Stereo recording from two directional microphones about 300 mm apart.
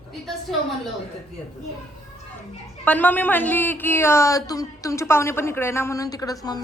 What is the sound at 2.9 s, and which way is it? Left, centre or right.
A man's voice, centre.